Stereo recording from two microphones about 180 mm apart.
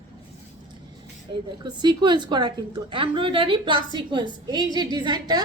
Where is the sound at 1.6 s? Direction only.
25° right (ahead or behind).